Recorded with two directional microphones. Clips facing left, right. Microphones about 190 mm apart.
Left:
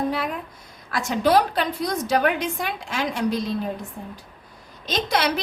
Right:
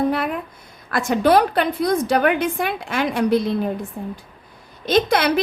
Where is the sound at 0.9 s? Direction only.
55° right (ahead or behind).